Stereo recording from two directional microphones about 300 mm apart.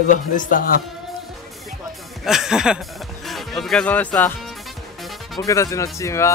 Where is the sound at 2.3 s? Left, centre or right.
Centre.